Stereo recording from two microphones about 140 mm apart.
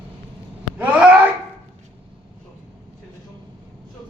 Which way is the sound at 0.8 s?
10° right (ahead or behind).